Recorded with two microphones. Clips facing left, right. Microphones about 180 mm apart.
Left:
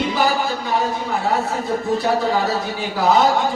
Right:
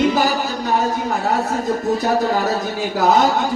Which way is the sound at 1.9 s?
40° right (ahead or behind).